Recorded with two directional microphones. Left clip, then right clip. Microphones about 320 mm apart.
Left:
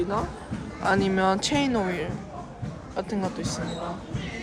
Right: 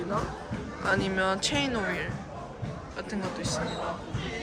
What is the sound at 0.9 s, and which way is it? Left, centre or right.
Speech, centre.